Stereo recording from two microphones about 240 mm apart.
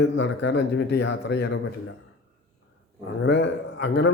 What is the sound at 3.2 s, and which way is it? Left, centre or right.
Speech, left.